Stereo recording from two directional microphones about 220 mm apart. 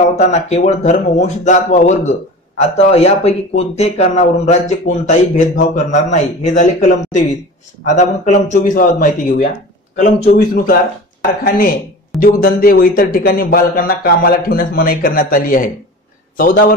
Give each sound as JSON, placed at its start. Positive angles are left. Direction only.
{"t": 0.2, "sound": "speech", "side_deg": 30}